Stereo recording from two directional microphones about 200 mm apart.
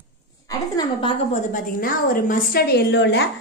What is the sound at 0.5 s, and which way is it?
Speech, 20° left (ahead or behind).